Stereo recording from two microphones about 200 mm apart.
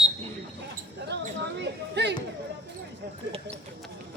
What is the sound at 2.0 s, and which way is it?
Music, 55° right (ahead or behind).